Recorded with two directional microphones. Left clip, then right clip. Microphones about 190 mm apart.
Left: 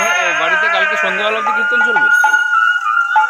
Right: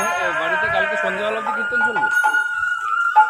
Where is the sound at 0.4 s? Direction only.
30° left (ahead or behind).